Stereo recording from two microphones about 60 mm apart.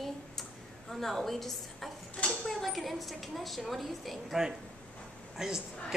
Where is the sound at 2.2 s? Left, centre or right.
Centre.